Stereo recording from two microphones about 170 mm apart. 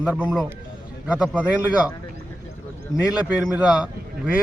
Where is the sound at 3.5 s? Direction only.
5° right (ahead or behind).